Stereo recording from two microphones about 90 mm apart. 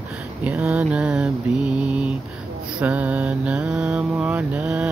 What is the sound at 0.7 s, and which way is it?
Mantra, 10° right (ahead or behind).